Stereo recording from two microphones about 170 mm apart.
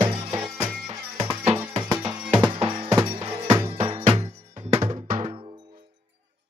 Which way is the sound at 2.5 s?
35° right (ahead or behind).